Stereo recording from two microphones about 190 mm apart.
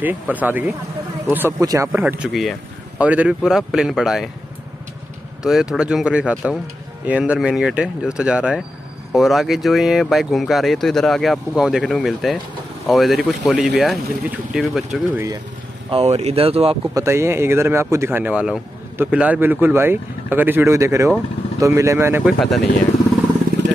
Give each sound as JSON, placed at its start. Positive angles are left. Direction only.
{"t": 0.0, "sound": "speech", "side_deg": -10}
{"t": 1.9, "sound": "speech", "side_deg": -5}
{"t": 5.4, "sound": "speech", "side_deg": -5}
{"t": 15.9, "sound": "speech", "side_deg": -35}
{"t": 16.9, "sound": "speech", "side_deg": -15}